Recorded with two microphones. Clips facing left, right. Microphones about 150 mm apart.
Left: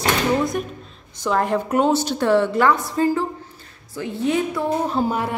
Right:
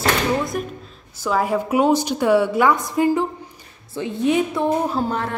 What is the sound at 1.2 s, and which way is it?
A woman's voice, 5° right (ahead or behind).